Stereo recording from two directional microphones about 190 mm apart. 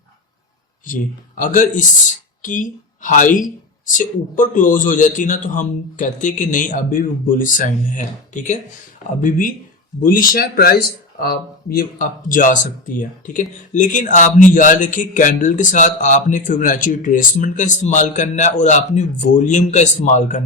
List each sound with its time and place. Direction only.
1.4 s speech: 45° left (ahead or behind)